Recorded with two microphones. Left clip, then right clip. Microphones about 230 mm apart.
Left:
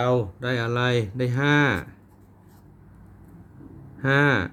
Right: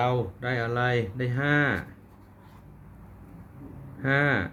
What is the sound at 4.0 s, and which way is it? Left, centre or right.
Speech, left.